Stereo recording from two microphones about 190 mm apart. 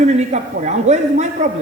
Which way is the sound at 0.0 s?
40° right (ahead or behind).